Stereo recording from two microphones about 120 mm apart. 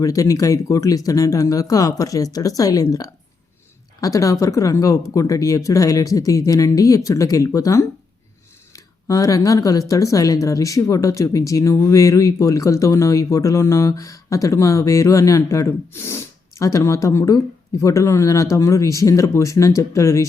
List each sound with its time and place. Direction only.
0.0 s speech: 30° left (ahead or behind)